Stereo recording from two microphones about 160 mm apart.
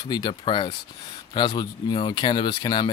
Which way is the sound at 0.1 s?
25° left (ahead or behind).